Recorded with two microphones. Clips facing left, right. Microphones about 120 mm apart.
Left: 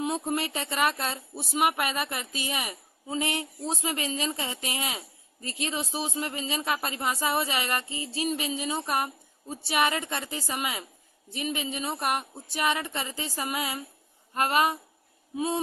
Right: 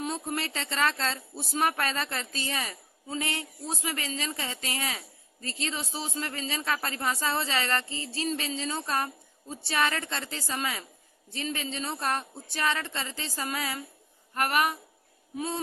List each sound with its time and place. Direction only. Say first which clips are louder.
0.0 s speech: left 4 dB; 20° left (ahead or behind)